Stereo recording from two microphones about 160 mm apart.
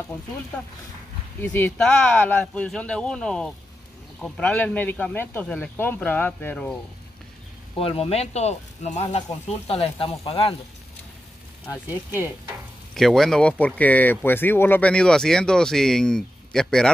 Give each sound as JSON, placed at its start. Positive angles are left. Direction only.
{"t": 1.4, "sound": "speech", "side_deg": 10}
{"t": 7.8, "sound": "speech", "side_deg": 35}
{"t": 11.7, "sound": "speech", "side_deg": 15}
{"t": 12.9, "sound": "speech", "side_deg": 0}